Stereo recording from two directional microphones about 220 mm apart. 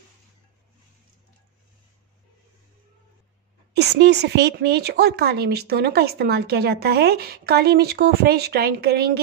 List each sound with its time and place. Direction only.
3.7 s a woman's voice: 50° right (ahead or behind)